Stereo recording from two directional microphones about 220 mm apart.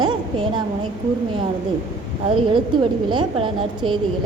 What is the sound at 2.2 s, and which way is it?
A woman's voice, 25° right (ahead or behind).